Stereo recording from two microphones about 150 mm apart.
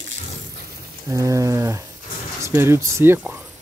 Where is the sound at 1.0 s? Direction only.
20° right (ahead or behind).